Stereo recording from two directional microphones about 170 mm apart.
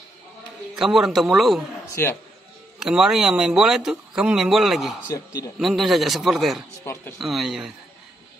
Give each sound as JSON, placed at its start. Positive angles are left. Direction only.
{"t": 0.7, "sound": "speech", "side_deg": 0}
{"t": 2.0, "sound": "speech", "side_deg": 15}
{"t": 2.8, "sound": "speech", "side_deg": -5}
{"t": 5.0, "sound": "a man's voice", "side_deg": 20}
{"t": 5.6, "sound": "speech", "side_deg": 0}
{"t": 6.8, "sound": "speech", "side_deg": 15}
{"t": 7.2, "sound": "speech", "side_deg": 0}